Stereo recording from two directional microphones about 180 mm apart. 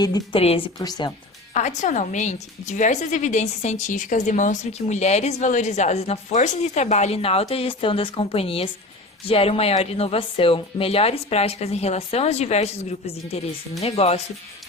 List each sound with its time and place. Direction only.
0.0 s a woman's voice: 20° left (ahead or behind)
1.5 s a woman's voice: 45° left (ahead or behind)